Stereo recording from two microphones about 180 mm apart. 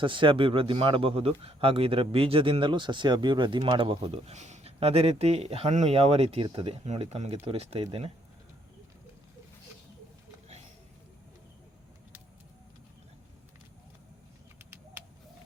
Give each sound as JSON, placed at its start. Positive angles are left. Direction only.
{"t": 0.0, "sound": "speech", "side_deg": -25}